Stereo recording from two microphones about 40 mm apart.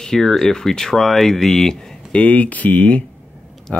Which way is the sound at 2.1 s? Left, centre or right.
Left.